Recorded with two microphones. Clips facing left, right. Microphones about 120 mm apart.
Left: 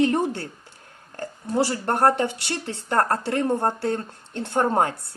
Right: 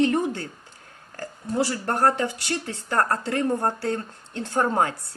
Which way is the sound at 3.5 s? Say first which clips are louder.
Left 1 dB; 25° left (ahead or behind).